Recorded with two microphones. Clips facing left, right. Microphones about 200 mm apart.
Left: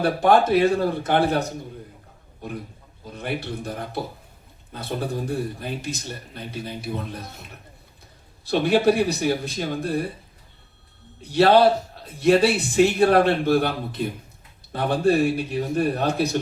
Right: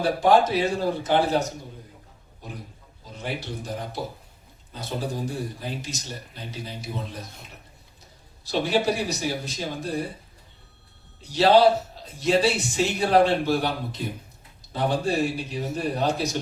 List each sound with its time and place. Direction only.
0.0 s a man's voice: 60° left (ahead or behind)
8.4 s a man's voice: 60° left (ahead or behind)
11.2 s a man's voice: 60° left (ahead or behind)